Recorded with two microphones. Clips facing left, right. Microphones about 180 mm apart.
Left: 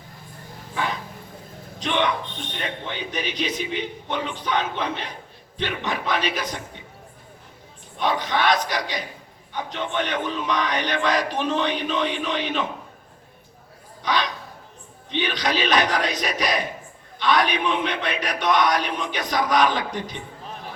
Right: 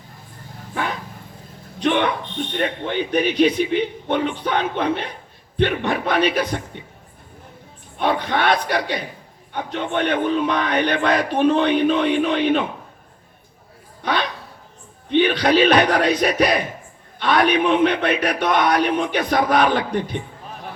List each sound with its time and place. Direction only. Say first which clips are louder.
1.8 s a sound: right 5 dB; 55° right (ahead or behind)
2.6 s speech: right 8 dB; 55° right (ahead or behind)
7.9 s speech: right 3 dB; 55° right (ahead or behind)
14.0 s dog: right 2 dB; 55° right (ahead or behind)
15.1 s speech: right 9 dB; 60° right (ahead or behind)